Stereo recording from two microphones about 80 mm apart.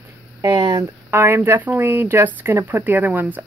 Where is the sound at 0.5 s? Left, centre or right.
Right.